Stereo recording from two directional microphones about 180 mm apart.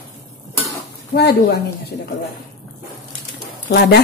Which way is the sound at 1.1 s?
65° left (ahead or behind).